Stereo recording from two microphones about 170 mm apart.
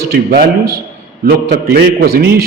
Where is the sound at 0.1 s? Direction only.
65° right (ahead or behind).